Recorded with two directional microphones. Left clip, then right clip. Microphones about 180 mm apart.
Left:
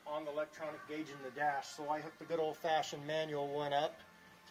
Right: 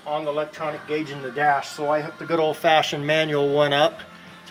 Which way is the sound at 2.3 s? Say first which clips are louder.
Right 17 dB; 30° right (ahead or behind).